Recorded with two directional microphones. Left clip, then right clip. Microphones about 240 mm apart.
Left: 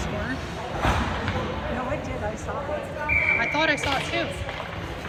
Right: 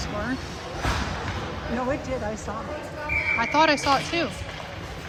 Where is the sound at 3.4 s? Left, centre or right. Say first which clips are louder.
Right 2 dB; centre.